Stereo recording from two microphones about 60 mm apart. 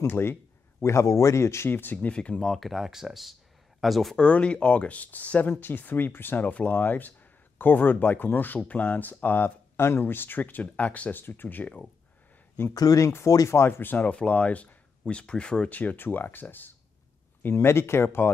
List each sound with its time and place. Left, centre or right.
0.0 s speech: left
0.8 s speech: left
1.7 s speech: left
2.0 s speech: centre
2.4 s speech: centre
4.2 s speech: left
12.7 s speech: left
13.7 s speech: left; by 15.7 s centre
15.7 s speech: left